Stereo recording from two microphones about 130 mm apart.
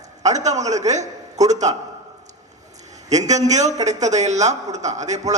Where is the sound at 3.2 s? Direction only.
60° right (ahead or behind).